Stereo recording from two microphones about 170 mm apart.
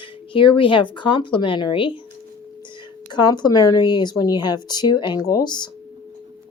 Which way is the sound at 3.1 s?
25° left (ahead or behind).